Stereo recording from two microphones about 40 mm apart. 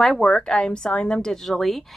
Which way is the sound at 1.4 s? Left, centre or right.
Centre.